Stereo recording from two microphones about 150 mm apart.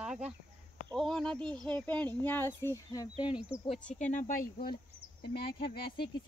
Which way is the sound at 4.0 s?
55° left (ahead or behind).